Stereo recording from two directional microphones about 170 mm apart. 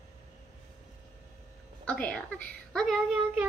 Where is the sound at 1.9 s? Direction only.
5° left (ahead or behind).